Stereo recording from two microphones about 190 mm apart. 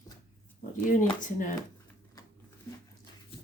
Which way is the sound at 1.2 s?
45° left (ahead or behind).